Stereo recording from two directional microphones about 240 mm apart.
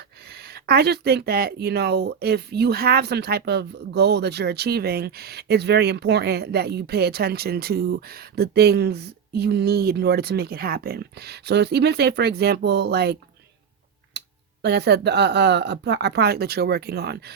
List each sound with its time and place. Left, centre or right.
0.4 s speech: right
14.1 s tick-tock: right
14.6 s speech: right